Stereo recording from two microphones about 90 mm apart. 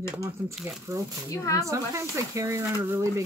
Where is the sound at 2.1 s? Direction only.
35° right (ahead or behind).